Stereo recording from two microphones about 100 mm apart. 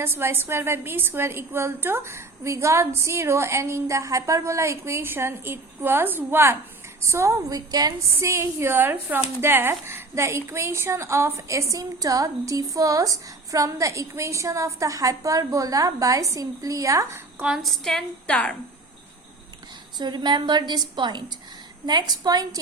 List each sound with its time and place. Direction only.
0.0 s a woman's voice: 20° right (ahead or behind)
17.4 s a woman's voice: centre (ahead or behind)
20.0 s a woman's voice: 45° right (ahead or behind)